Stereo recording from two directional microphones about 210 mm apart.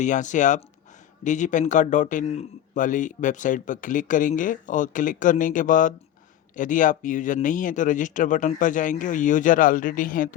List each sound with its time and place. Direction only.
0.0 s speech: 35° left (ahead or behind)